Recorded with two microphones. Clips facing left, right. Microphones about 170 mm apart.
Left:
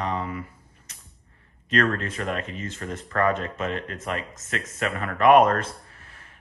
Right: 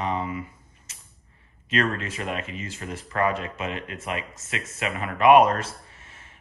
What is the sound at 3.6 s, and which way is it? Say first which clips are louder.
Speech: left 2 dB; 40° left (ahead or behind).